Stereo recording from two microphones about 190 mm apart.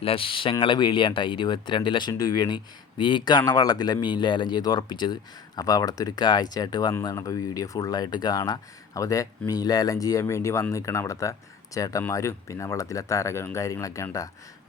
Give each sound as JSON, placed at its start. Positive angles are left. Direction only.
{"t": 0.0, "sound": "speech", "side_deg": 30}